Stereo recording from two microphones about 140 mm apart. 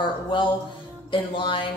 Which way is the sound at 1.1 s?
35° left (ahead or behind).